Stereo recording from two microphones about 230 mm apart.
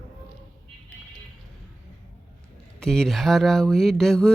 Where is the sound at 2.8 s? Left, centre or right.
Centre.